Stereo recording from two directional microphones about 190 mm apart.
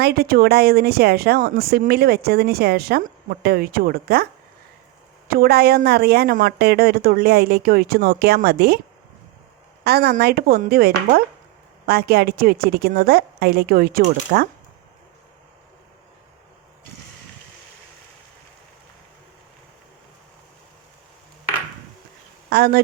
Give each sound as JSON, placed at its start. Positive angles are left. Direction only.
{"t": 0.0, "sound": "speech", "side_deg": -55}
{"t": 5.3, "sound": "a woman's voice", "side_deg": -55}
{"t": 9.8, "sound": "a woman's voice", "side_deg": -55}
{"t": 22.4, "sound": "speech", "side_deg": -55}